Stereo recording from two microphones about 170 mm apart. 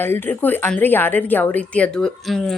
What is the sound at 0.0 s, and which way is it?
A woman's voice, 10° left (ahead or behind).